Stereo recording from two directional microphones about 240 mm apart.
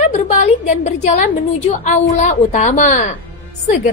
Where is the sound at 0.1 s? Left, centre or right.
Left.